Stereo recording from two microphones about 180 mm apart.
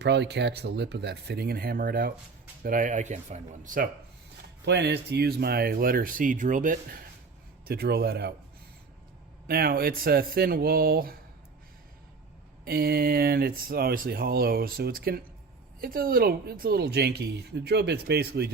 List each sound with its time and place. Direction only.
0.0 s speech: 70° right (ahead or behind); by 3.8 s 45° right (ahead or behind)
4.6 s speech: 70° right (ahead or behind); by 6.7 s 45° right (ahead or behind)
7.6 s speech: 60° right (ahead or behind)
9.5 s speech: 60° right (ahead or behind)
12.6 s speech: 60° right (ahead or behind)